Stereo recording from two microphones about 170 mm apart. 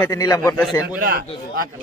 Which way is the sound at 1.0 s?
60° right (ahead or behind).